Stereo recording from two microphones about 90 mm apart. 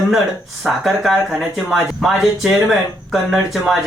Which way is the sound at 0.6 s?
Centre (ahead or behind).